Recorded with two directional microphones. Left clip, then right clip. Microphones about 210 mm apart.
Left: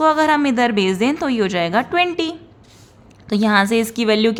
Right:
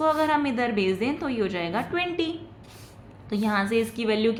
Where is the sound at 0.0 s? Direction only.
45° left (ahead or behind).